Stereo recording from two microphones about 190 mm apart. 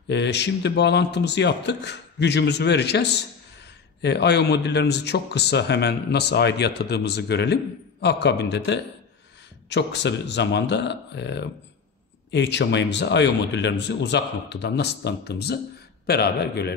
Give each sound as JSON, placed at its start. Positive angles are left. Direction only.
{"t": 0.1, "sound": "speech", "side_deg": 65}